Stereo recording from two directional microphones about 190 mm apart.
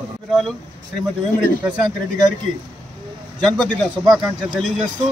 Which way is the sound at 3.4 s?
5° left (ahead or behind).